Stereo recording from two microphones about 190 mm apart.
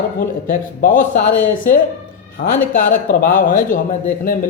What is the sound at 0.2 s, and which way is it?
Speech, 45° left (ahead or behind).